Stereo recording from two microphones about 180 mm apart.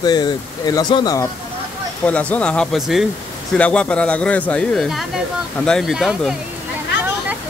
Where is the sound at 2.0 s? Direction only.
10° left (ahead or behind).